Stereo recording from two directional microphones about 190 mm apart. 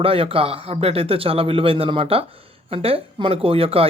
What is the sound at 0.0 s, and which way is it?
Speech, 30° right (ahead or behind).